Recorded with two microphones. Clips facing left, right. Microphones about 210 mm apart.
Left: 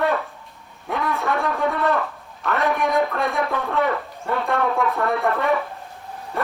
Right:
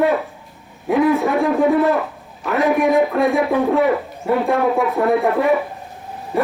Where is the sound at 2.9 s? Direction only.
15° right (ahead or behind).